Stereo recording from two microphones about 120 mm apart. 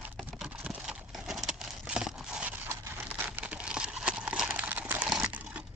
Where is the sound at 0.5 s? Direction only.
10° right (ahead or behind).